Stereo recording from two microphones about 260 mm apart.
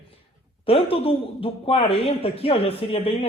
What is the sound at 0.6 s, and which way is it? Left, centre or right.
Speech, left.